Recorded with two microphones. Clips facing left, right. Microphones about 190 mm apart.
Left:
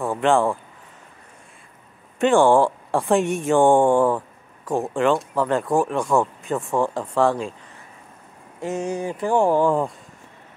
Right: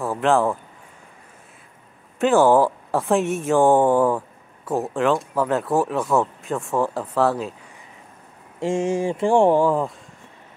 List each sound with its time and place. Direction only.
0.0 s speech: centre (ahead or behind)
2.1 s speech: 5° right (ahead or behind)
8.5 s a sound: 25° right (ahead or behind)
9.6 s speech: centre (ahead or behind)